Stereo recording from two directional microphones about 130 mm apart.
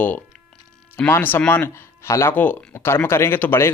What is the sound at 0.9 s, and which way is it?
Speech, 15° left (ahead or behind).